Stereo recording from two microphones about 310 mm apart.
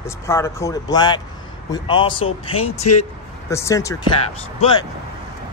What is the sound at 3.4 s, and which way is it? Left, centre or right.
Speech, centre.